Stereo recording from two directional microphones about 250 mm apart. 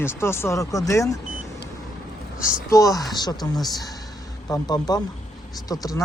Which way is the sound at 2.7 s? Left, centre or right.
Centre.